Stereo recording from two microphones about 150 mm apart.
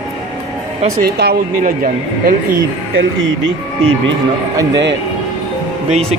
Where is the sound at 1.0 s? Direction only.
90° right; by 2.5 s 70° right (ahead or behind).